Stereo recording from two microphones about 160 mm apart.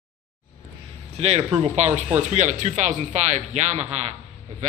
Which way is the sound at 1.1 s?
40° right (ahead or behind).